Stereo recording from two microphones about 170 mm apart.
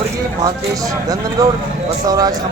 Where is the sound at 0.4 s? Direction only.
20° right (ahead or behind).